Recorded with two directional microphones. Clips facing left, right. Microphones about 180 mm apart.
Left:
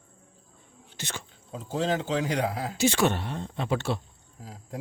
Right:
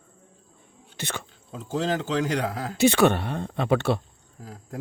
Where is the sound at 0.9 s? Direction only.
60° right (ahead or behind).